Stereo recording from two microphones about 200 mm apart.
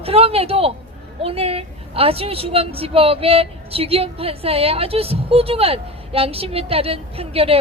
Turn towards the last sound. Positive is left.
turn(degrees=-30)  # may be behind; listen again after turning